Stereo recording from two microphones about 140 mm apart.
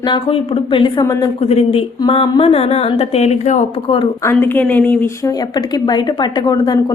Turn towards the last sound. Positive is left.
turn(degrees=30)  # may be behind; listen again after turning